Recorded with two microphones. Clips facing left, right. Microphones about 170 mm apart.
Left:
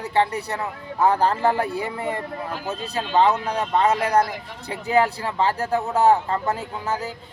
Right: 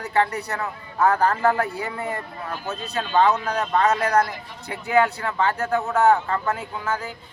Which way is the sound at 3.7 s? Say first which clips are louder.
Left 1 dB; 25° left (ahead or behind).